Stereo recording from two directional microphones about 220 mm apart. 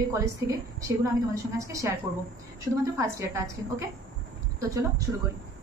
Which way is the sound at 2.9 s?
15° right (ahead or behind).